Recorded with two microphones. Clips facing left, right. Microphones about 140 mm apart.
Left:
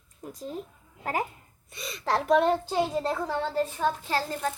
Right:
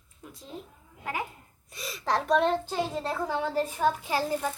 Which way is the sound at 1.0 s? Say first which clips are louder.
Left 4 dB; 40° left (ahead or behind).